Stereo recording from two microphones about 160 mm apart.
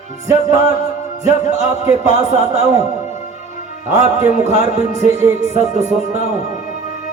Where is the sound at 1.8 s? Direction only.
20° right (ahead or behind).